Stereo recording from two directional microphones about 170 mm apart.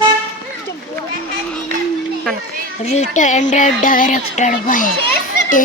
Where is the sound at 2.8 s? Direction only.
40° left (ahead or behind).